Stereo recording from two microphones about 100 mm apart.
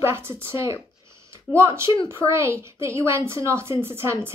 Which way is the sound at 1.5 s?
25° right (ahead or behind).